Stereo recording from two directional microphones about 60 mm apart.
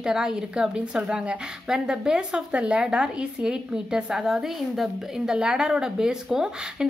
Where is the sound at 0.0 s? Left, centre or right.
Centre.